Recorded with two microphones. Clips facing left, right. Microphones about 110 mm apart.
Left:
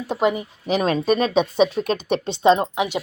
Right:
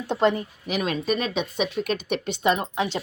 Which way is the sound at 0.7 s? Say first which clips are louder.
Left 6 dB; 35° left (ahead or behind).